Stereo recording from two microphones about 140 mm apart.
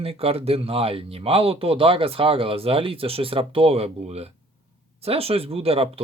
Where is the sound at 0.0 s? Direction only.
45° right (ahead or behind).